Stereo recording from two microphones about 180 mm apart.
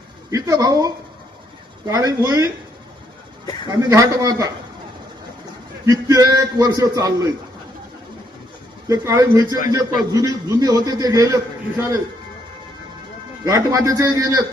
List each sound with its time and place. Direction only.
0.3 s a man's voice: 20° right (ahead or behind)
3.7 s a man's voice: 20° right (ahead or behind)
5.8 s a man's voice: 20° right (ahead or behind)
8.9 s a man's voice: 20° right (ahead or behind)
13.4 s a man's voice: 20° right (ahead or behind)